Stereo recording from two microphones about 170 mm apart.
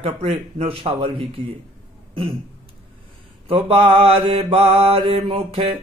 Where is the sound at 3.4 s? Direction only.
35° right (ahead or behind).